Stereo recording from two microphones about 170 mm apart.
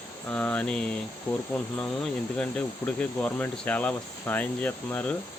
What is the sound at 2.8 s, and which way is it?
Speech, 15° left (ahead or behind).